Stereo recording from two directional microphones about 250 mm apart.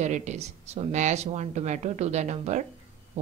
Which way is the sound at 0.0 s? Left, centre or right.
Right.